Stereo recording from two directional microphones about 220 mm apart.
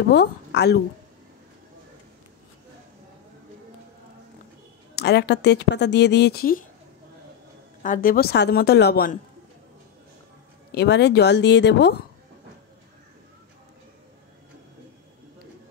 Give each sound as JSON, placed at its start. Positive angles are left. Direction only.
{"t": 0.1, "sound": "a woman's voice", "side_deg": 50}
{"t": 4.9, "sound": "a woman's voice", "side_deg": 50}
{"t": 7.8, "sound": "a woman's voice", "side_deg": 40}
{"t": 10.7, "sound": "a woman's voice", "side_deg": 50}